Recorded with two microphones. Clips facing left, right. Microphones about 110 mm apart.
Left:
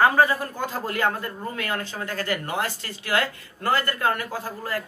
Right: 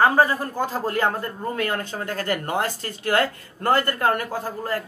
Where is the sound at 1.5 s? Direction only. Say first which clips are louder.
Right 5 dB; 40° right (ahead or behind).